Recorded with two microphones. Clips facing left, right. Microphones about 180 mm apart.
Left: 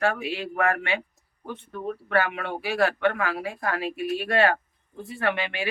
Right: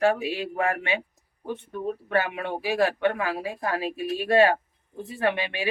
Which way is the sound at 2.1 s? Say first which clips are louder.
Left 1 dB; 20° right (ahead or behind).